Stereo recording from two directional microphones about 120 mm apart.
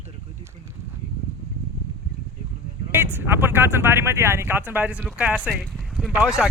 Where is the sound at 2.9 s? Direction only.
20° right (ahead or behind).